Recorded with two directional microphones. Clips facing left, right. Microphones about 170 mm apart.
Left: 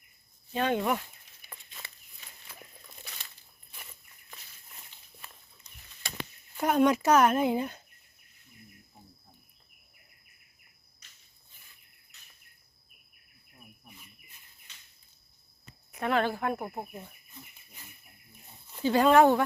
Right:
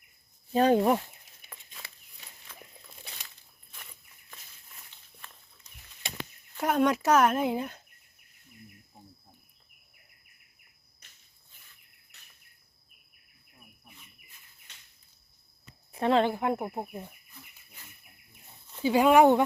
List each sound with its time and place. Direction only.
0.5 s speech: 35° right (ahead or behind)
1.5 s chicken: centre (ahead or behind)
2.5 s a sound: 10° left (ahead or behind)
6.6 s speech: centre (ahead or behind)
14.7 s cricket: 60° right (ahead or behind)
15.9 s speech: 30° right (ahead or behind)
18.8 s speech: 10° right (ahead or behind)